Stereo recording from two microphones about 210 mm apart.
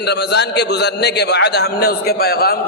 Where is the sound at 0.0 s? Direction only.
50° left (ahead or behind).